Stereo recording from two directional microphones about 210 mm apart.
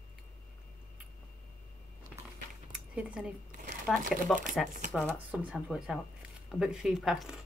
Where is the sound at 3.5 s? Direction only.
35° right (ahead or behind).